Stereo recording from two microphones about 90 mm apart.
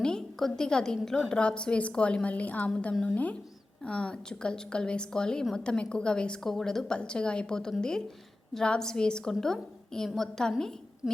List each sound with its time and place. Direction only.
0.0 s a woman's voice: 5° left (ahead or behind)